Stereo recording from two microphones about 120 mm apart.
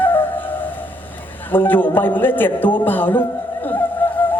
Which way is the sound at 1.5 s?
15° left (ahead or behind).